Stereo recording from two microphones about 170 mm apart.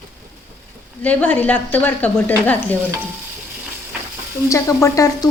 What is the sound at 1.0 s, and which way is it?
A woman's voice, 10° left (ahead or behind).